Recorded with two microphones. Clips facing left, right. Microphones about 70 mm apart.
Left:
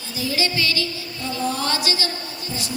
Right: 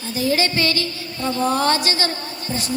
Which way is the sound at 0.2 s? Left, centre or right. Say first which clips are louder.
Right 4 dB; right.